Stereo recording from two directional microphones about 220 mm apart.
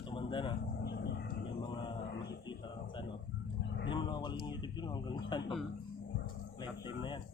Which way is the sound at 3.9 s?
20° left (ahead or behind).